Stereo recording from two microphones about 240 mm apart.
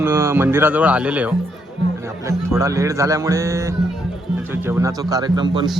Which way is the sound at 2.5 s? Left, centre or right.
Centre.